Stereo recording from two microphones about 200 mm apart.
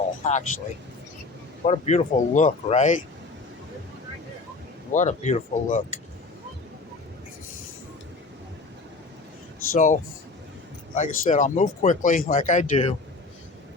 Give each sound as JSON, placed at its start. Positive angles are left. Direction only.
{"t": 0.2, "sound": "speech", "side_deg": 35}
{"t": 1.6, "sound": "speech", "side_deg": 35}
{"t": 4.9, "sound": "speech", "side_deg": 35}
{"t": 9.7, "sound": "speech", "side_deg": 40}